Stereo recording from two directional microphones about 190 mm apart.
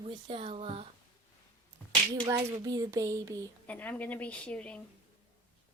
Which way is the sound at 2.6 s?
20° right (ahead or behind).